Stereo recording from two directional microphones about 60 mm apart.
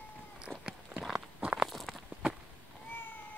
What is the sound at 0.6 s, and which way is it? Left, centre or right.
Walk, centre.